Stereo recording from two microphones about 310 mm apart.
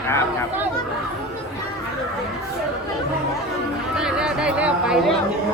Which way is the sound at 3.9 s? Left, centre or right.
Centre.